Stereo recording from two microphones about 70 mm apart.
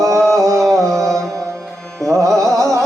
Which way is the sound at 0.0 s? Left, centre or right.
Right.